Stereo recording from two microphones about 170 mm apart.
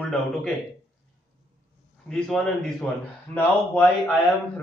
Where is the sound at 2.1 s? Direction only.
5° left (ahead or behind).